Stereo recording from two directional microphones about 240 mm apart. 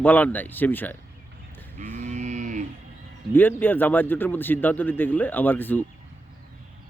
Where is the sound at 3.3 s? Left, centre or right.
Centre.